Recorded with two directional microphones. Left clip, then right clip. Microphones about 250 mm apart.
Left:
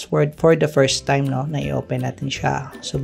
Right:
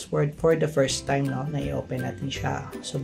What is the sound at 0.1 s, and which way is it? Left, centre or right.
Speech, left.